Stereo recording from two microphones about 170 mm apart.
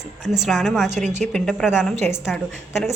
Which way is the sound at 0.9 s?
45° right (ahead or behind).